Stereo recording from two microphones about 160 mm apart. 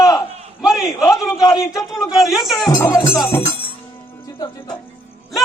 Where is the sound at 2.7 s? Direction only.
25° left (ahead or behind).